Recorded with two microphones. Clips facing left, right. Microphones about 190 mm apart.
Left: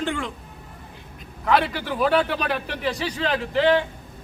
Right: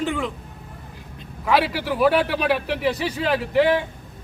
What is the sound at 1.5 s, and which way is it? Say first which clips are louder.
A man's voice: right 1 dB; 5° right (ahead or behind).